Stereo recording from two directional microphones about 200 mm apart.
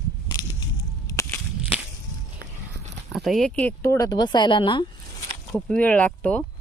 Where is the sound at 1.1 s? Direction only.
15° left (ahead or behind).